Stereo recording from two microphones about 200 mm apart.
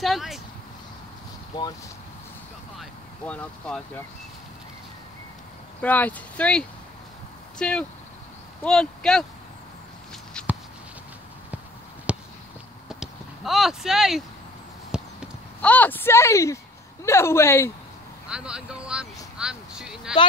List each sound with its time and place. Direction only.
0.0 s speech: centre (ahead or behind)
1.5 s speech: 20° left (ahead or behind)
2.8 s speech: 5° left (ahead or behind)
5.8 s speech: 10° left (ahead or behind)
10.4 s a sound: 5° left (ahead or behind)
12.1 s a sound: 5° right (ahead or behind)
12.8 s clip-clop: centre (ahead or behind)
15.6 s speech: 10° left (ahead or behind)
18.3 s speech: 5° right (ahead or behind)